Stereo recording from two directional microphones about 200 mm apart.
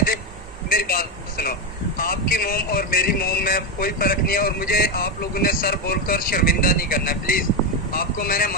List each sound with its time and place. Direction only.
0.7 s speech: 45° left (ahead or behind)